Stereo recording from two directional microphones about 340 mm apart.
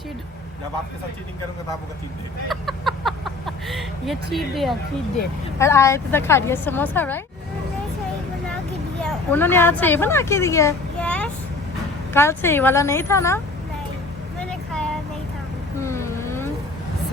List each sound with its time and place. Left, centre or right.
2.5 s a woman's voice: centre
9.0 s a woman's voice: centre
14.3 s vehicle: centre